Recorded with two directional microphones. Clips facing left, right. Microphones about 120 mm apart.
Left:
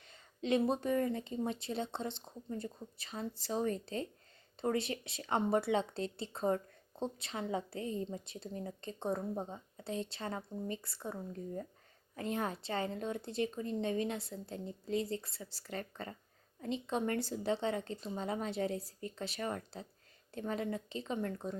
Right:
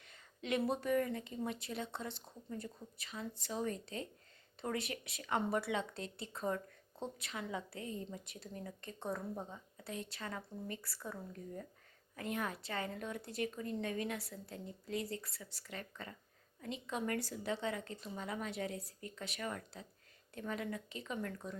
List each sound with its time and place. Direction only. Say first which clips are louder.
0.0 s a woman's voice: left 6 dB; 30° left (ahead or behind)